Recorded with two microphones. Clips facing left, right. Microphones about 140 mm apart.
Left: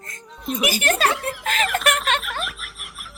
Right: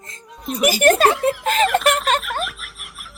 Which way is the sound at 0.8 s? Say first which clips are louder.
Right 9 dB; 45° right (ahead or behind).